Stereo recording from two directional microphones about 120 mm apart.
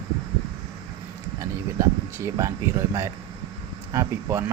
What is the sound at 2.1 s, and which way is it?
Speech, 25° right (ahead or behind).